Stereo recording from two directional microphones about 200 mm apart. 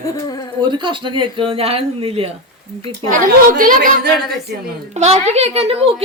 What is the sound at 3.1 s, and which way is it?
A woman's voice, 40° right (ahead or behind).